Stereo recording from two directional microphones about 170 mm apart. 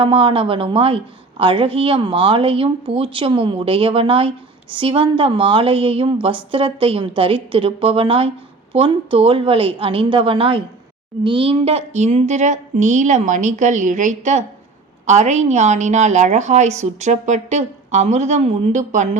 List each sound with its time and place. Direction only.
0.0 s a woman's voice: 30° right (ahead or behind)